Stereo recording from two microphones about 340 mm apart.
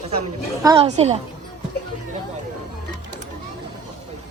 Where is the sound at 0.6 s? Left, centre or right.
Centre.